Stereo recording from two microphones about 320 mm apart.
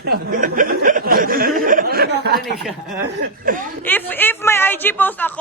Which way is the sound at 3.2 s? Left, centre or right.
Right.